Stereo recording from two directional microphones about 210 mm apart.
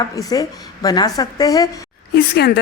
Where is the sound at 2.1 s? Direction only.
50° left (ahead or behind).